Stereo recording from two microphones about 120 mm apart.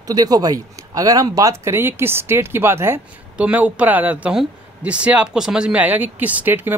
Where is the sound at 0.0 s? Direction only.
30° right (ahead or behind).